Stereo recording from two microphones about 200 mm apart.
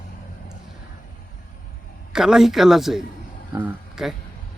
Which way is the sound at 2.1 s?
Centre (ahead or behind).